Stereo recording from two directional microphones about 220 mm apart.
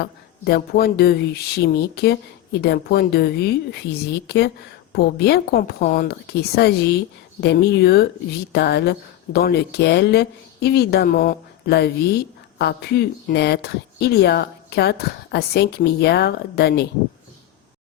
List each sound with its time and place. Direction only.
0.0 s speech: 45° left (ahead or behind)